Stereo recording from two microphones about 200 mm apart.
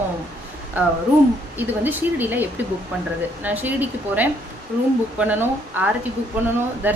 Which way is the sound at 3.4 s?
10° right (ahead or behind).